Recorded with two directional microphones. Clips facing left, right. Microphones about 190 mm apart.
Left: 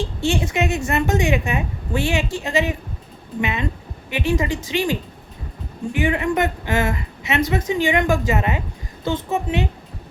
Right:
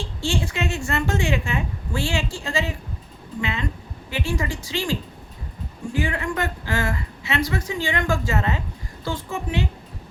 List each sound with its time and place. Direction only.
0.0 s speech: 20° left (ahead or behind)